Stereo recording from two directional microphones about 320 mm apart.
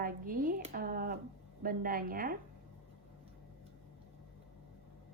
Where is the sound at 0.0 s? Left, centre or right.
Right.